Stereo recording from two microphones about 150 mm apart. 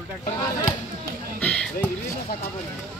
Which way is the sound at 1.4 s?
5° left (ahead or behind).